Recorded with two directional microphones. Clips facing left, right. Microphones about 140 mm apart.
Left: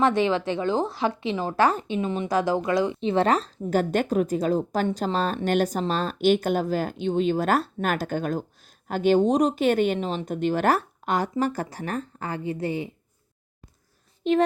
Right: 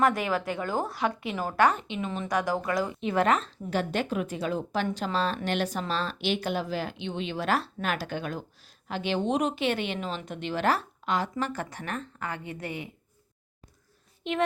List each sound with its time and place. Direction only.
0.0 s a woman's voice: 25° left (ahead or behind)
14.3 s speech: 35° left (ahead or behind)